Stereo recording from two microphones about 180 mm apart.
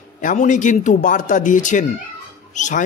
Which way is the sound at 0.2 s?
45° left (ahead or behind).